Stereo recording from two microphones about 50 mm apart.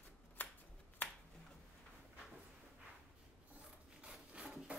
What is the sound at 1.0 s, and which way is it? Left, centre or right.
Finger snapping, left.